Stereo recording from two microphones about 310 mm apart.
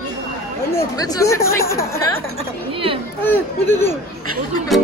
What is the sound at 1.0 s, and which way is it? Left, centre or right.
Speech, centre.